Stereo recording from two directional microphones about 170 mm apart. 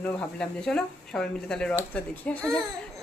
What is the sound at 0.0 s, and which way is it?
Speech, 5° left (ahead or behind).